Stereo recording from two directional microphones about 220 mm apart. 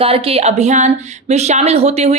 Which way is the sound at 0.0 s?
25° right (ahead or behind).